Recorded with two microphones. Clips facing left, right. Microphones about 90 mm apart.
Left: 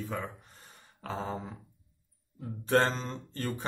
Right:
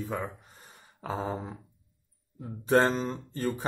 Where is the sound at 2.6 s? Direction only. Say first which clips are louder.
Right 3 dB; 15° right (ahead or behind).